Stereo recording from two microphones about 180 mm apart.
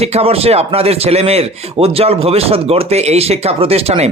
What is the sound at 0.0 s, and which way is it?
Speech, 35° right (ahead or behind).